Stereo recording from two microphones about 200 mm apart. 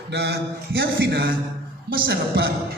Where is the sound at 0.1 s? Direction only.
55° right (ahead or behind).